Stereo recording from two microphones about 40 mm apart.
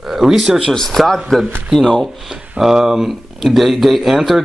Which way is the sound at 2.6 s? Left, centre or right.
Centre.